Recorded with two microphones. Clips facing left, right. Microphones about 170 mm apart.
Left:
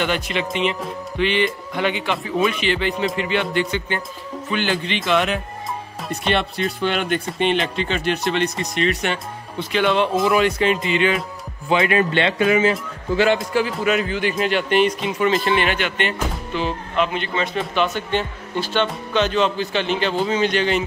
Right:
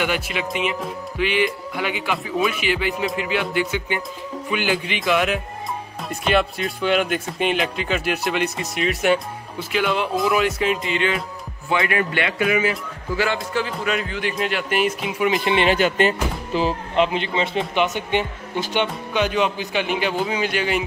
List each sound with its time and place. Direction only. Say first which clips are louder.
0.0 s speech: left 1 dB; 10° right (ahead or behind)
11.7 s a man's voice: left 4 dB; 25° left (ahead or behind)
13.5 s speech: left 4 dB; 10° left (ahead or behind)
13.9 s speech: left 3 dB; centre (ahead or behind); by 15.7 s 20° right (ahead or behind)
15.7 s speech: right 5 dB; 35° right (ahead or behind); by 20.8 s 10° right (ahead or behind)